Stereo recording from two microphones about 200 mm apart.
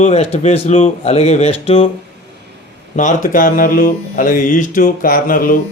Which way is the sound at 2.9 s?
40° left (ahead or behind).